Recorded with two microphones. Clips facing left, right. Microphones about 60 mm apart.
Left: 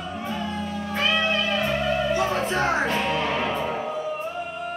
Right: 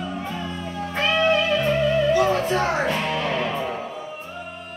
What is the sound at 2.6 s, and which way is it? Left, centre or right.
Music, centre.